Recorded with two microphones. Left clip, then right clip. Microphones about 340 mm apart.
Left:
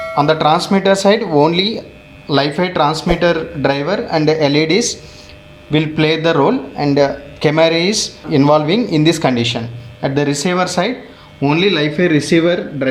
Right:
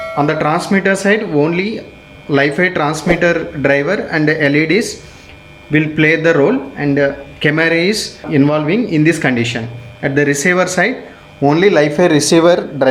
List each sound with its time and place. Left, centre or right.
0.0 s a man's voice: centre